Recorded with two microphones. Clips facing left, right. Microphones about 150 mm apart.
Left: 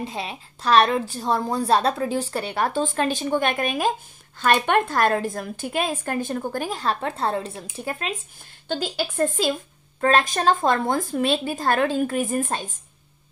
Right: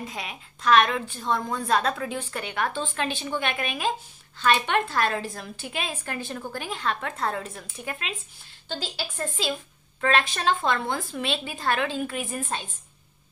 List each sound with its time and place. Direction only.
0.0 s a woman's voice: 30° left (ahead or behind)
8.6 s a woman's voice: 55° left (ahead or behind)